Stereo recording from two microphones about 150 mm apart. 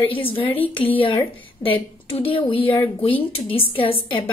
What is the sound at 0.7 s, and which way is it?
Speech, 10° left (ahead or behind).